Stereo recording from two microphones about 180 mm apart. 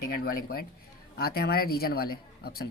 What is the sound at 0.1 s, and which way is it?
A woman's voice, 55° left (ahead or behind).